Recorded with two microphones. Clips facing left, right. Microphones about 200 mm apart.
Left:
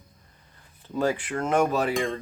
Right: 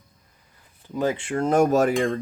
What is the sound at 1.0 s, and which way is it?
Speech, 20° right (ahead or behind).